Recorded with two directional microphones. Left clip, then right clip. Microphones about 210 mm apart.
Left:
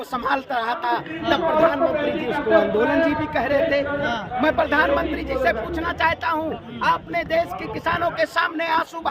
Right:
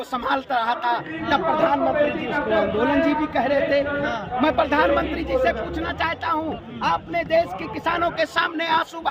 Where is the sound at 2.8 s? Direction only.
5° right (ahead or behind).